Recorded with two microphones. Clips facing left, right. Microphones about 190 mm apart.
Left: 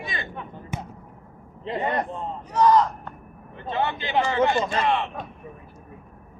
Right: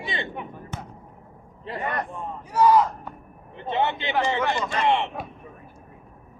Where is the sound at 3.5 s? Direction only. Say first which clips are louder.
Right 2 dB; 25° right (ahead or behind).